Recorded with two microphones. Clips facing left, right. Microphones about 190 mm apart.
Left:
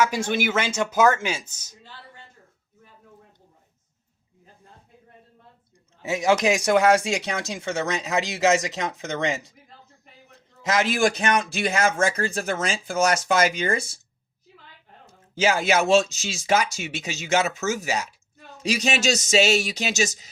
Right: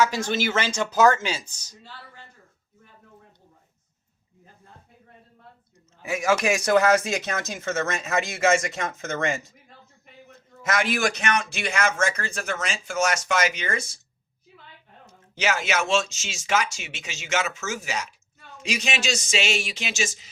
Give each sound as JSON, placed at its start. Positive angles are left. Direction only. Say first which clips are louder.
{"t": 0.0, "sound": "speech", "louder": "left 1 dB", "side_deg": 10}
{"t": 6.0, "sound": "speech", "louder": "left 2 dB", "side_deg": 20}
{"t": 10.8, "sound": "speech", "louder": "left 4 dB", "side_deg": 25}
{"t": 15.4, "sound": "speech", "louder": "left 4 dB", "side_deg": 35}